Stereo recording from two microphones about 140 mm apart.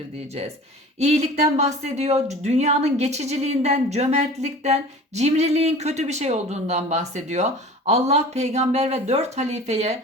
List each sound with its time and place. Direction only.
0.9 s speech: 50° right (ahead or behind)